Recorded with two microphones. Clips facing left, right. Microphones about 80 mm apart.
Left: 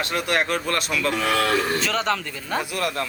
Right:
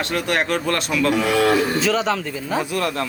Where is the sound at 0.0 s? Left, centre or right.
Centre.